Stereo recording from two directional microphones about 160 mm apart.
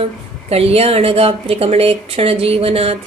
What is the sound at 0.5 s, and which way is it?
Speech, 40° right (ahead or behind).